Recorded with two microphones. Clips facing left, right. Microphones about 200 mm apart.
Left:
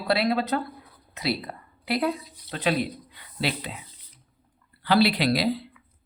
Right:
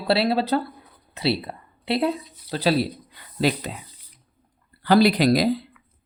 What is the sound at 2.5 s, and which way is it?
Speech, 35° right (ahead or behind).